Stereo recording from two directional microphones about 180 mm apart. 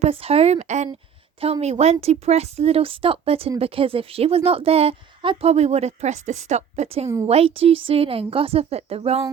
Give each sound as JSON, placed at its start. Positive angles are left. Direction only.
{"t": 0.0, "sound": "a woman's voice", "side_deg": -35}